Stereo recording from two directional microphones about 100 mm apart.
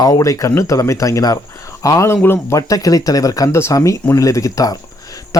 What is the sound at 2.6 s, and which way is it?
Speech, 35° left (ahead or behind).